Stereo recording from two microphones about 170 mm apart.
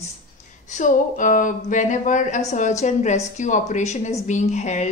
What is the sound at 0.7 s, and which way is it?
A woman's voice, 50° left (ahead or behind).